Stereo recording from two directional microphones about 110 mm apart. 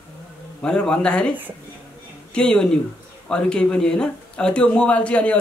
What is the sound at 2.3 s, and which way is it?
Speech, 5° left (ahead or behind).